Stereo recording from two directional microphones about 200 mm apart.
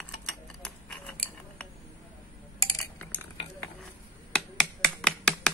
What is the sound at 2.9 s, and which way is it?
Cutlery, 10° left (ahead or behind).